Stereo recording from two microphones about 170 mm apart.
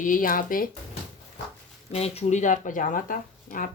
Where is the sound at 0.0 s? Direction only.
55° left (ahead or behind).